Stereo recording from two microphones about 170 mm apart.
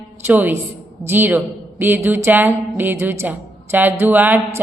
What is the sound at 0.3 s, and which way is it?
A woman's voice, 10° right (ahead or behind).